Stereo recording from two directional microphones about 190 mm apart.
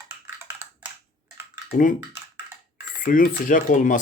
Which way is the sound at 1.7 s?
45° left (ahead or behind).